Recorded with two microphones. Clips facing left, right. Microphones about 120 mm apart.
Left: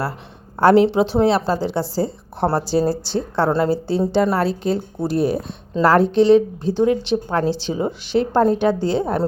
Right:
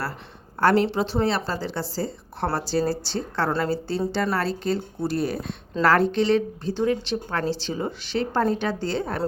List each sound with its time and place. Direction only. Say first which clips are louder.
0.6 s a woman's voice: left 7 dB; 20° left (ahead or behind)